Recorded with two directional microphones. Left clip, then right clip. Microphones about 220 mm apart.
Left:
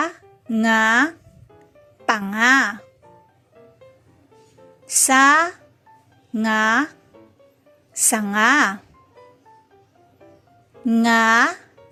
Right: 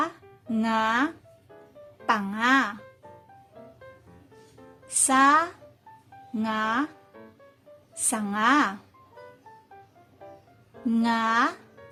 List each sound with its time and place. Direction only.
0.0 s music: 20° left (ahead or behind)
2.0 s a woman's voice: 20° left (ahead or behind)
5.0 s a woman's voice: 20° left (ahead or behind)
8.0 s a woman's voice: 20° left (ahead or behind)
10.8 s a woman's voice: 15° left (ahead or behind)